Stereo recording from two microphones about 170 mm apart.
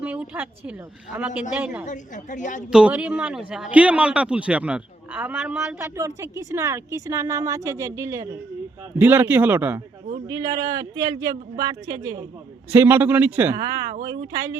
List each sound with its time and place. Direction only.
0.0 s a man's voice: 10° right (ahead or behind)
1.9 s speech: 45° left (ahead or behind)
2.7 s a man's voice: 5° right (ahead or behind)
5.8 s a woman's voice: 20° right (ahead or behind)
10.2 s a woman's voice: 20° right (ahead or behind)
14.0 s a woman's voice: 25° right (ahead or behind)